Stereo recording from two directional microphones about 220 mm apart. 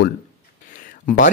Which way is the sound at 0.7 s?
35° left (ahead or behind).